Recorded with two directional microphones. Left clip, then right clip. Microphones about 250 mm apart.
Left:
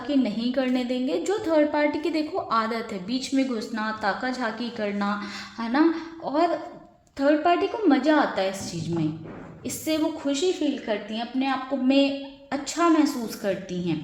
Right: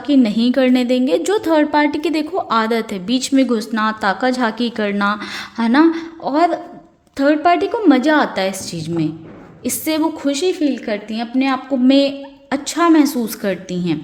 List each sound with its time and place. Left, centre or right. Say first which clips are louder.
0.1 s a woman's voice: right 10 dB; right